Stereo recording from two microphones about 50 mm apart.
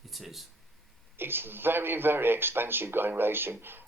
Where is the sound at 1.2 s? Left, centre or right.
Right.